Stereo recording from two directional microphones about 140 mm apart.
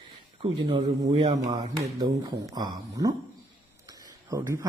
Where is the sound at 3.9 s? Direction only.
25° right (ahead or behind).